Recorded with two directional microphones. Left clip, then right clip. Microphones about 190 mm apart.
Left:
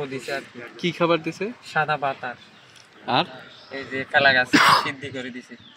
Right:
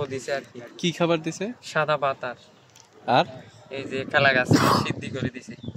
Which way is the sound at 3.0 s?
60° right (ahead or behind).